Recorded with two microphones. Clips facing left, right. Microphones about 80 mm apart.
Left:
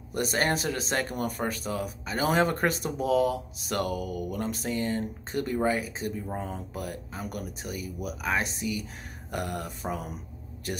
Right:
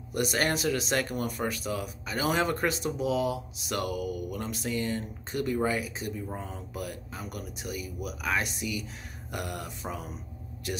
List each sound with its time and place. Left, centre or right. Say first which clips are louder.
0.1 s speech: left 1 dB; left